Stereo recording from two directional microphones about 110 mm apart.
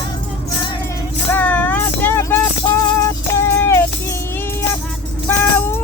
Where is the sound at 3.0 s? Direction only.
25° left (ahead or behind).